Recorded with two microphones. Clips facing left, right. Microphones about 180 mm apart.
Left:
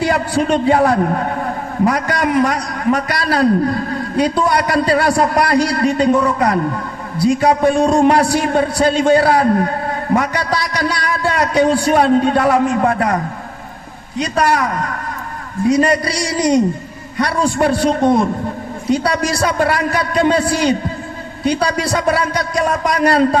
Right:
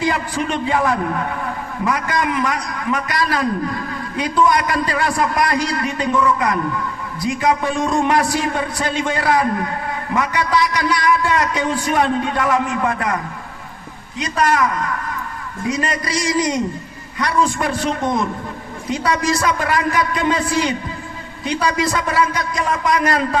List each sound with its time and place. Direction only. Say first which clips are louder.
0.1 s a man's voice: left 6 dB; 35° left (ahead or behind)
17.2 s a man's voice: left 3 dB; 35° left (ahead or behind)
20.4 s a man's voice: left 2 dB; 70° left (ahead or behind)
21.6 s a man's voice: left 3 dB; 35° left (ahead or behind)